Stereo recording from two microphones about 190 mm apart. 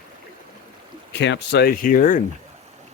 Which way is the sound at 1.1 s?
65° left (ahead or behind).